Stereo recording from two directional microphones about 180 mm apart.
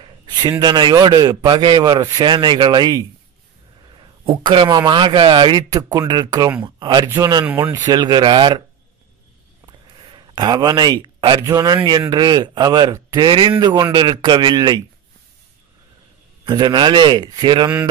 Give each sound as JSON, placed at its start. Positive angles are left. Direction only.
{"t": 0.0, "sound": "a man's voice", "side_deg": -25}
{"t": 7.4, "sound": "speech", "side_deg": -10}
{"t": 7.8, "sound": "a man's voice", "side_deg": -25}
{"t": 9.7, "sound": "a man's voice", "side_deg": -25}
{"t": 16.4, "sound": "a man's voice", "side_deg": -25}